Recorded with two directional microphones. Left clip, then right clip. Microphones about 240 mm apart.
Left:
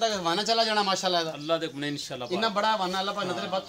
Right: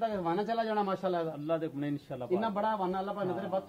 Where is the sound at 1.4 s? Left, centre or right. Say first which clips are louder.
Left 5 dB; centre.